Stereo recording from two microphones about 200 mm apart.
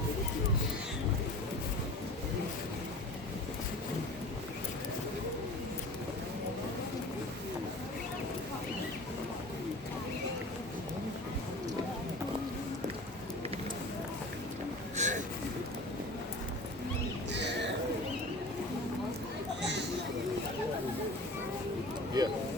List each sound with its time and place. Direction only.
14.9 s a sound: 35° right (ahead or behind)
17.3 s bird: 60° right (ahead or behind)
22.2 s vehicle: 20° right (ahead or behind)